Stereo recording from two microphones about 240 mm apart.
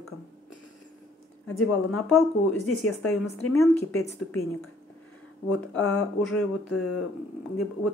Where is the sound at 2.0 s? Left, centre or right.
Centre.